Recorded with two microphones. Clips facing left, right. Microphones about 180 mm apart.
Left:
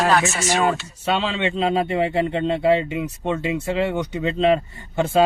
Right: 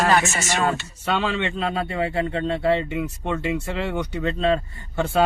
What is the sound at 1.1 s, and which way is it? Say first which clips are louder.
Speech: left 2 dB; 20° left (ahead or behind).